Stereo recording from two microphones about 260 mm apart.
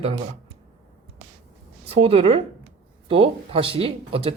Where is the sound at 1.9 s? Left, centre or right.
Right.